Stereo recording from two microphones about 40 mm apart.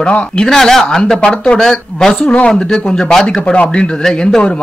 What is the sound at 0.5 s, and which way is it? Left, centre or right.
Speech, centre.